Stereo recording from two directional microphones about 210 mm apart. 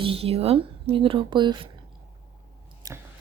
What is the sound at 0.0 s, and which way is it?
Speech, 25° right (ahead or behind).